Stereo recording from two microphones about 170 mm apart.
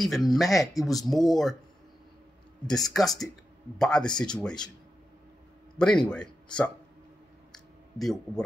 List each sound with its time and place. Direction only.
0.0 s speech: centre (ahead or behind)
2.7 s speech: centre (ahead or behind)
5.8 s speech: 5° left (ahead or behind)
7.5 s clicking: centre (ahead or behind)